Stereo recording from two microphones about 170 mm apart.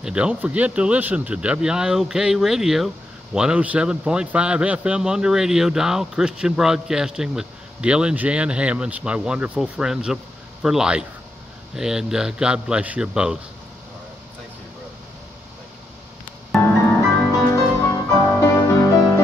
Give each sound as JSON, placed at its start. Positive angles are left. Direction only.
{"t": 0.0, "sound": "speech", "side_deg": -5}
{"t": 17.5, "sound": "music", "side_deg": 15}